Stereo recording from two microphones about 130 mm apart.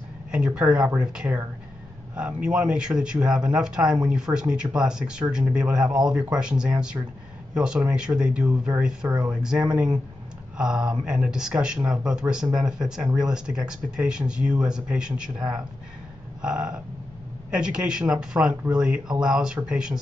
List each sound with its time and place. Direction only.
0.6 s speech: 10° right (ahead or behind)